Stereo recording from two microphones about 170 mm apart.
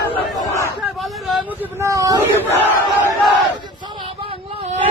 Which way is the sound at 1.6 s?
15° right (ahead or behind).